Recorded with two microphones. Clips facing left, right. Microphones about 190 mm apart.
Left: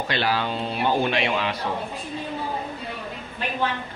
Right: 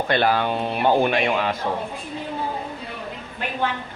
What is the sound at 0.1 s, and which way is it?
A man's voice, 50° right (ahead or behind).